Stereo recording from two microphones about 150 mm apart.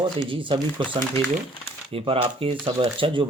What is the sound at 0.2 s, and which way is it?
Speech, 35° right (ahead or behind).